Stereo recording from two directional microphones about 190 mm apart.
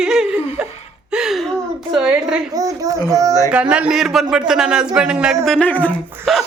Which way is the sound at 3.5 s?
5° right (ahead or behind).